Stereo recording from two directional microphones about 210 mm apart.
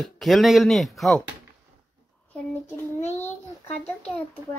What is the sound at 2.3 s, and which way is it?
Speech, 10° left (ahead or behind).